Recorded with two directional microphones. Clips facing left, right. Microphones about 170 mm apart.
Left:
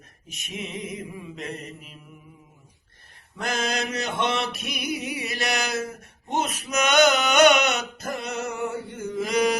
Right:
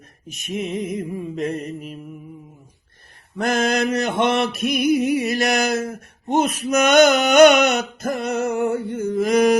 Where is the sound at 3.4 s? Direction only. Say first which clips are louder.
Right 8 dB; 50° right (ahead or behind).